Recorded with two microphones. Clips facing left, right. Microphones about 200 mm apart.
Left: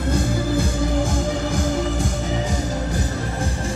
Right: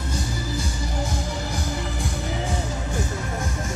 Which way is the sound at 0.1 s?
55° left (ahead or behind).